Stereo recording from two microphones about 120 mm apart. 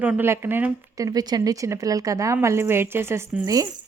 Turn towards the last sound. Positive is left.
turn(degrees=-25)  # may be behind; listen again after turning